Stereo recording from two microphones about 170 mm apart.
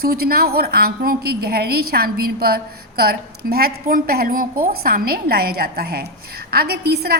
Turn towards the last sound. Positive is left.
turn(degrees=-65)  # may be behind; listen again after turning